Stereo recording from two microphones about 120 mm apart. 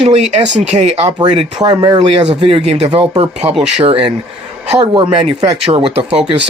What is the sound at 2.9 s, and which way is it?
Speech, 40° right (ahead or behind).